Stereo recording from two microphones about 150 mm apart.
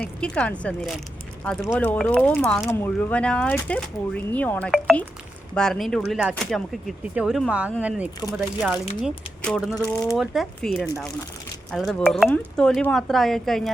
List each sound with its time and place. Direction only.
0.2 s speech: 10° left (ahead or behind); by 8.1 s 10° right (ahead or behind)
9.0 s speech: 5° left (ahead or behind)
9.8 s speech: 20° left (ahead or behind)
10.2 s speech: centre (ahead or behind)